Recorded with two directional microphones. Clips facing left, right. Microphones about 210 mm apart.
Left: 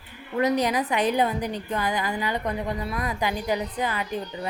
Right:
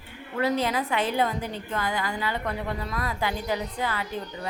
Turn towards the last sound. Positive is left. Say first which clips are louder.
# left 3 dB
turn(degrees=15)  # may be behind; listen again after turning